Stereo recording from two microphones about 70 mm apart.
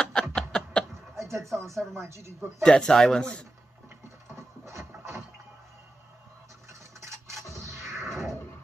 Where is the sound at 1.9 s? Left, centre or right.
Right.